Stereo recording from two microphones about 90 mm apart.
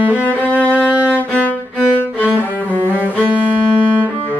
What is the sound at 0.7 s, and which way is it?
Music, 20° right (ahead or behind).